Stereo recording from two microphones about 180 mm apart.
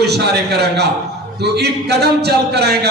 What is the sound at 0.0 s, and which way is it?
A man's voice, 65° right (ahead or behind).